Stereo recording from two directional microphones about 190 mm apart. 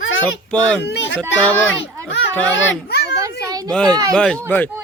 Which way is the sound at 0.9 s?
70° left (ahead or behind).